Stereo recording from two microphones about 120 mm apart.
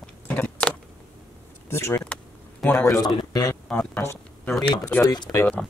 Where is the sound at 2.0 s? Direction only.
10° left (ahead or behind).